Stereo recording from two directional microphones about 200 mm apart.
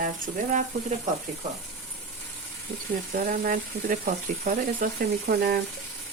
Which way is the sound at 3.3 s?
45° right (ahead or behind).